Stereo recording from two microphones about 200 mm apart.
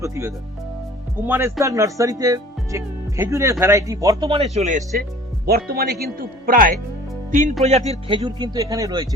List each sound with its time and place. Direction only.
0.0 s speech: 15° right (ahead or behind); by 5.0 s 35° right (ahead or behind)
5.5 s speech: 50° right (ahead or behind)
7.6 s speech: 35° right (ahead or behind); by 9.0 s 15° right (ahead or behind)